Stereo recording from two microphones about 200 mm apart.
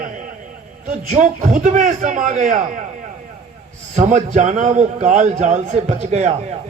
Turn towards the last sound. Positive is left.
turn(degrees=-35)  # may be behind; listen again after turning